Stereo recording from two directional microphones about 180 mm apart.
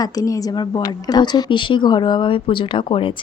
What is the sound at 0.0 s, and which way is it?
A woman's voice, 20° left (ahead or behind).